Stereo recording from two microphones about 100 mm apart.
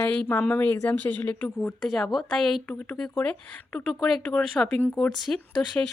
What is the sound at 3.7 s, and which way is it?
Speech, 5° left (ahead or behind).